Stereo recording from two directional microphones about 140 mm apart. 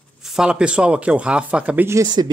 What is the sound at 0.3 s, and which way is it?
Speech, 5° right (ahead or behind).